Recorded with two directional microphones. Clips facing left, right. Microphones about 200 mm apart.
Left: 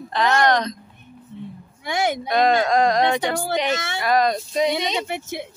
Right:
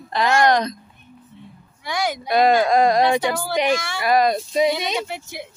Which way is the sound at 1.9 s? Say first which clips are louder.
Left 2 dB; 25° left (ahead or behind).